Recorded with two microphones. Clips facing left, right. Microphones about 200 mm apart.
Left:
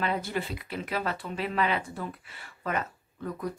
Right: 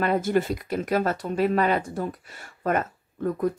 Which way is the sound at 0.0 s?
50° right (ahead or behind).